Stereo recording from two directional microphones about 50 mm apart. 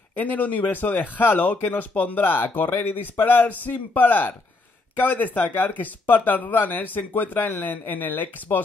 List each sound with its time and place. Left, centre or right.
0.2 s a man's voice: left